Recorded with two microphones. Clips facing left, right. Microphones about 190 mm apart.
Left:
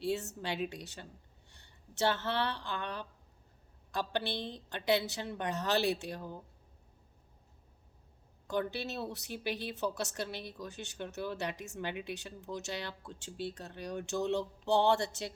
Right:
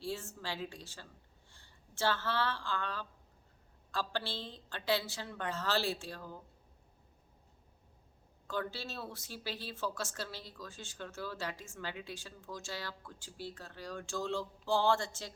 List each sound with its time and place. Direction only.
0.0 s speech: 20° left (ahead or behind)
8.4 s speech: 20° left (ahead or behind)